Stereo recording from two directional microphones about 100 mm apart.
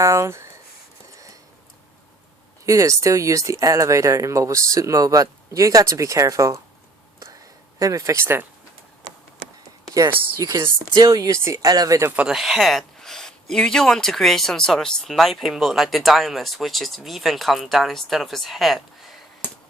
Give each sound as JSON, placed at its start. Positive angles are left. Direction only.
{"t": 0.0, "sound": "speech", "side_deg": -30}
{"t": 1.1, "sound": "a sound", "side_deg": -35}
{"t": 2.6, "sound": "speech", "side_deg": -35}
{"t": 7.8, "sound": "speech", "side_deg": -35}
{"t": 10.3, "sound": "speech", "side_deg": -35}
{"t": 12.1, "sound": "speech", "side_deg": -10}